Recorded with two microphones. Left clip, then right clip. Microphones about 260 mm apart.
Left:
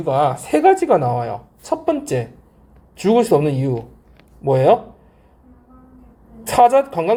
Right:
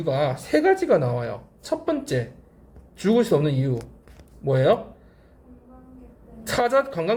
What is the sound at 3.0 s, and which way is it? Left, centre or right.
Speech, centre.